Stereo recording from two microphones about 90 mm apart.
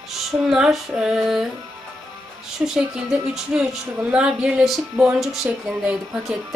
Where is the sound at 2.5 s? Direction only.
5° right (ahead or behind).